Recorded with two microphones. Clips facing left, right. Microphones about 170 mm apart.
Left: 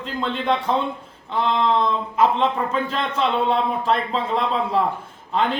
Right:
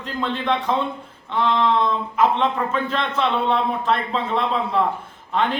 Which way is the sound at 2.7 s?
30° left (ahead or behind).